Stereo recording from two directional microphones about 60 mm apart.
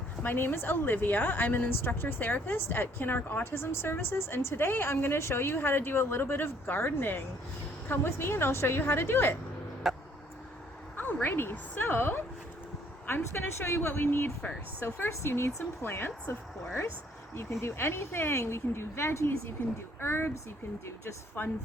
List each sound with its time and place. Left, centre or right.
0.2 s a woman's voice: left
9.8 s vehicle: centre
10.9 s a sound: left
11.5 s a woman's voice: left
17.3 s a woman's voice: left
21.4 s a woman's voice: left